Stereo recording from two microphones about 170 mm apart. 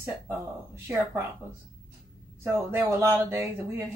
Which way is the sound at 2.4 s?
15° right (ahead or behind).